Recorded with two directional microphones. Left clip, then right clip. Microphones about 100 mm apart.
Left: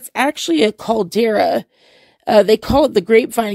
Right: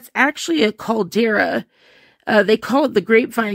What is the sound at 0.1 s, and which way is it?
Speech, 30° left (ahead or behind).